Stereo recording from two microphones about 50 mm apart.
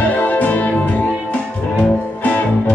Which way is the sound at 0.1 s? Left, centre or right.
Left.